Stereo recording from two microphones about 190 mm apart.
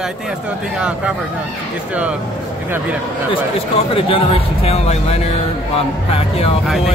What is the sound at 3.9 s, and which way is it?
Speech, 30° left (ahead or behind).